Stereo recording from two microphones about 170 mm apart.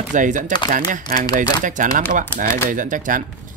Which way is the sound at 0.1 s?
50° right (ahead or behind).